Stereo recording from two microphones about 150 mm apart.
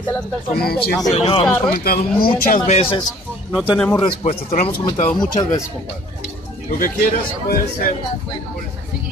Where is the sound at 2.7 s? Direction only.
45° left (ahead or behind).